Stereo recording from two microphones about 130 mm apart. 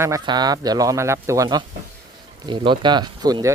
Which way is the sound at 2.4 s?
35° right (ahead or behind).